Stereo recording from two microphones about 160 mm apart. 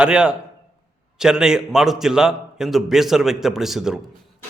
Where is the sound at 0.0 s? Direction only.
5° right (ahead or behind).